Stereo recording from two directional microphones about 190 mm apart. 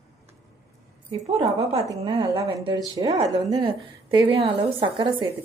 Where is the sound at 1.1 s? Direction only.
30° right (ahead or behind).